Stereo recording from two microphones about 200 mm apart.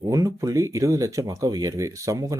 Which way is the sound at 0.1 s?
15° right (ahead or behind).